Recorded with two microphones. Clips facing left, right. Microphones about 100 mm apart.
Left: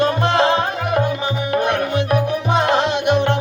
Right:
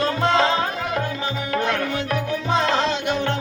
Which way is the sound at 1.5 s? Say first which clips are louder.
Left 4 dB; 20° left (ahead or behind).